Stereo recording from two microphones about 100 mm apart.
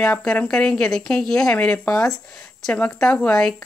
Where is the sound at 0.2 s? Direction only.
10° left (ahead or behind).